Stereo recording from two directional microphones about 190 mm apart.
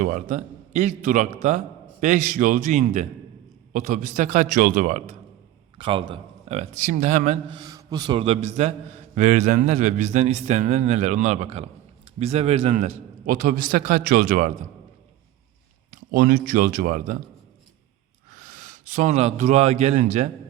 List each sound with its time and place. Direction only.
0.0 s a man's voice: 40° right (ahead or behind)
5.7 s a man's voice: 25° right (ahead or behind)
7.5 s a man's voice: 20° right (ahead or behind); by 14.5 s 45° right (ahead or behind)
15.9 s a man's voice: 50° right (ahead or behind)
18.3 s a man's voice: 45° right (ahead or behind)